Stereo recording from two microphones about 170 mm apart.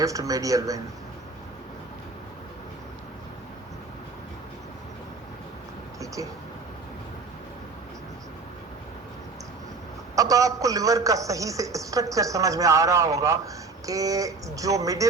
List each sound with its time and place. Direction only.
0.0 s a man's voice: 20° right (ahead or behind)
10.2 s a man's voice: 20° right (ahead or behind)